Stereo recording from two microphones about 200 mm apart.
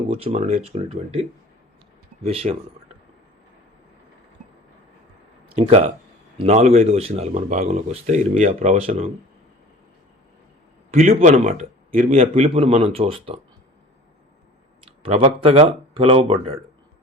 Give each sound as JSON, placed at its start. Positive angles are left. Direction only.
{"t": 0.1, "sound": "speech", "side_deg": -30}
{"t": 2.2, "sound": "speech", "side_deg": -30}
{"t": 5.5, "sound": "speech", "side_deg": -30}
{"t": 10.9, "sound": "speech", "side_deg": -35}
{"t": 14.8, "sound": "speech", "side_deg": -30}